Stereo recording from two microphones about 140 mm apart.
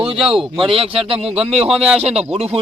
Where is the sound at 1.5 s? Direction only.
5° right (ahead or behind).